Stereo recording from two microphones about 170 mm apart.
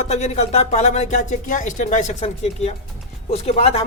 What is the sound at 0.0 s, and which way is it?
Speech, 40° left (ahead or behind).